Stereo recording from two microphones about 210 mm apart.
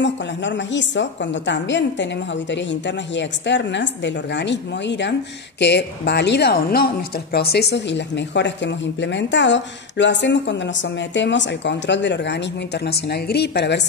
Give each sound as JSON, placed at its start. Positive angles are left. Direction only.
{"t": 0.0, "sound": "a woman's voice", "side_deg": 60}